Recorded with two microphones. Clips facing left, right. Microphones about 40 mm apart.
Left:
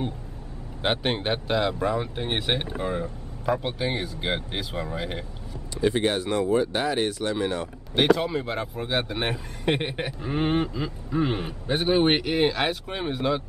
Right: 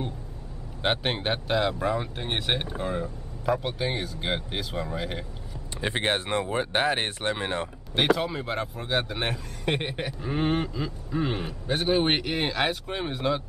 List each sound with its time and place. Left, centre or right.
0.8 s speech: centre
5.8 s speech: right
7.9 s a man's voice: centre